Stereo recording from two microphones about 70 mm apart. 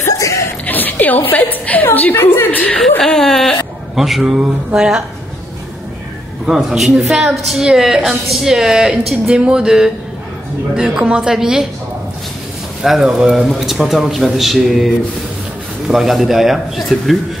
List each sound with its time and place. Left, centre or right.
0.0 s a sound: left
0.7 s a woman's voice: left
3.0 s a woman's voice: centre
6.4 s a woman's voice: centre
12.8 s a woman's voice: centre
15.9 s a woman's voice: centre